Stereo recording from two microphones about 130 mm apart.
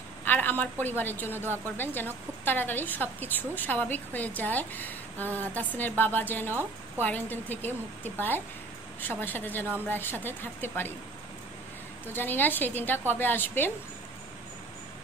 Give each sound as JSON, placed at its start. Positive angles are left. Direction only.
{"t": 0.2, "sound": "a woman's voice", "side_deg": 15}
{"t": 12.1, "sound": "a woman's voice", "side_deg": 15}